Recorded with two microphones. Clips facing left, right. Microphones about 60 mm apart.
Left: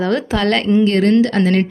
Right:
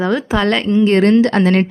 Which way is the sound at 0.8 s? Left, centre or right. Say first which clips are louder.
Right 5 dB; right.